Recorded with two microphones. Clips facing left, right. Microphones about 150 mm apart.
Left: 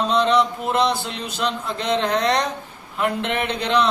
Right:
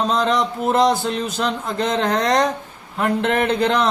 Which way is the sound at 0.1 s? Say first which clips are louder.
Left 1 dB; 45° right (ahead or behind).